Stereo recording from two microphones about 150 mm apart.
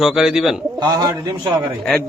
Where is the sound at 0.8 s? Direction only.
25° right (ahead or behind).